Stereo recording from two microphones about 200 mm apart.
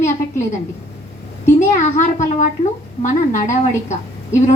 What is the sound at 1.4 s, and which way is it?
A woman's voice, 35° left (ahead or behind).